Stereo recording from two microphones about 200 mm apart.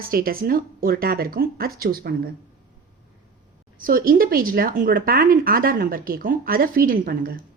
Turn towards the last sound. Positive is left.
turn(degrees=-45)  # may be behind; listen again after turning